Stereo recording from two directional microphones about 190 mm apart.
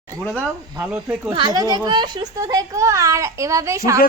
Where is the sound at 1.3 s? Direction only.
20° right (ahead or behind).